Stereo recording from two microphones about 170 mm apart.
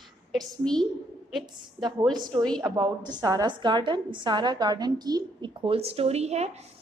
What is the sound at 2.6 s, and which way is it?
A woman's voice, 20° right (ahead or behind).